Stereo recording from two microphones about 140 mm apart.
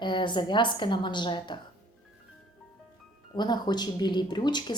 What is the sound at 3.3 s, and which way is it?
A woman's voice, 30° left (ahead or behind).